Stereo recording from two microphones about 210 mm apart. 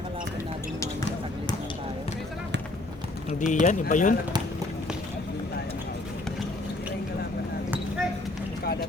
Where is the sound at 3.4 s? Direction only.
35° left (ahead or behind).